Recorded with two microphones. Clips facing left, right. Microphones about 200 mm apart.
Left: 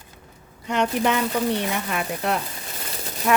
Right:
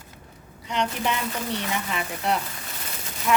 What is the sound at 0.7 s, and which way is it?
Speech, 50° left (ahead or behind).